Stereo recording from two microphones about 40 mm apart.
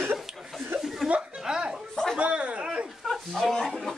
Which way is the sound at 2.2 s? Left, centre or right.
Right.